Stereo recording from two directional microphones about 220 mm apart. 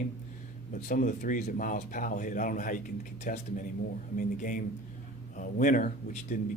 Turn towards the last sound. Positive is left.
turn(degrees=35)  # may be behind; listen again after turning